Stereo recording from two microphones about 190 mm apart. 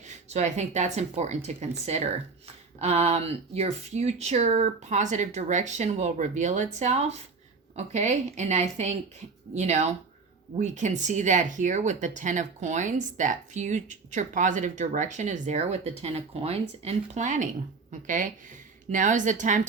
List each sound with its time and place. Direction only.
0.0 s speech: 35° right (ahead or behind)